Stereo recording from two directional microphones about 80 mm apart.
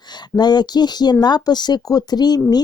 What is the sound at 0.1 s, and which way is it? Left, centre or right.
Speech, left.